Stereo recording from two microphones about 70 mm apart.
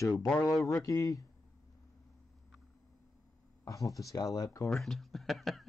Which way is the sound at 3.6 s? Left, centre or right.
Left.